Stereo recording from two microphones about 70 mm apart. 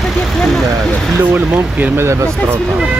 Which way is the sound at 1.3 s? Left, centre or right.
Right.